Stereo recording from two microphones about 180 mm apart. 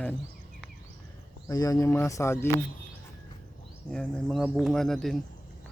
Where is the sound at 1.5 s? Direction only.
20° left (ahead or behind).